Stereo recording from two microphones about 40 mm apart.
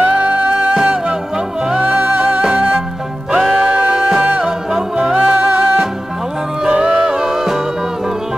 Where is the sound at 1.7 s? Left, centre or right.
Right.